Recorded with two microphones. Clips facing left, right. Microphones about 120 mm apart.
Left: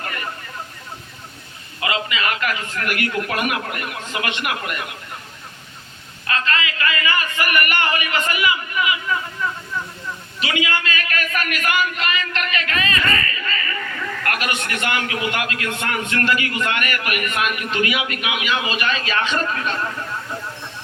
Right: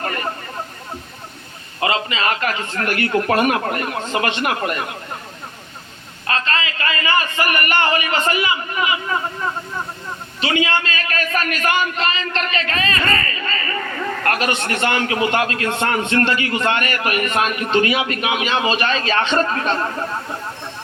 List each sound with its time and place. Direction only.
0.0 s vehicle: 35° right (ahead or behind)
1.8 s a man's voice: 35° right (ahead or behind)
6.2 s a man's voice: 30° right (ahead or behind)